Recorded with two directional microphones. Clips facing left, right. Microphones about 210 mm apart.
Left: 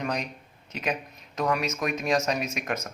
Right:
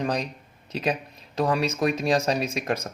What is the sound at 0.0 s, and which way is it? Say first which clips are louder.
A man's voice: right 4 dB; 35° right (ahead or behind).